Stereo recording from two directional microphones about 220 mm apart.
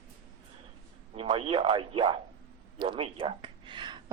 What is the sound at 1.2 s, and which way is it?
Speech, 25° right (ahead or behind).